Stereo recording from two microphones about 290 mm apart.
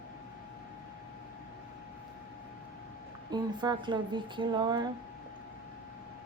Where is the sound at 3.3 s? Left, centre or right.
Centre.